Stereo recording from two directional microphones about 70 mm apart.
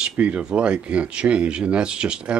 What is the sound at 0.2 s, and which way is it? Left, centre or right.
Speech, centre.